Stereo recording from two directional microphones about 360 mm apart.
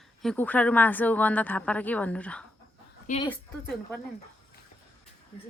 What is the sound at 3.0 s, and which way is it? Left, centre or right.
Speech, centre.